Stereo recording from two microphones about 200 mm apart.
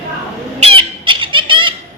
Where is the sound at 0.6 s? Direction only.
25° right (ahead or behind).